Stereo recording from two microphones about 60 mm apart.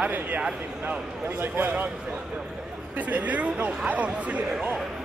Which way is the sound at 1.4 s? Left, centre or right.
Right.